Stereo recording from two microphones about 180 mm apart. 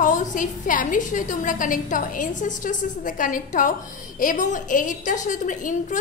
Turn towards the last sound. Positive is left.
turn(degrees=45)  # may be behind; listen again after turning